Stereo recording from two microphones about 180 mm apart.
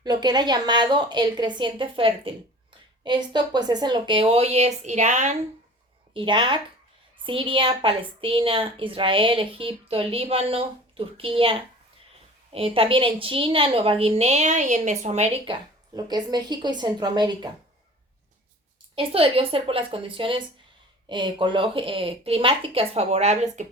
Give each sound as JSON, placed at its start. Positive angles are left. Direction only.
{"t": 0.0, "sound": "a woman's voice", "side_deg": -20}
{"t": 6.1, "sound": "a woman's voice", "side_deg": -25}
{"t": 16.0, "sound": "a woman's voice", "side_deg": -25}
{"t": 18.9, "sound": "a woman's voice", "side_deg": -30}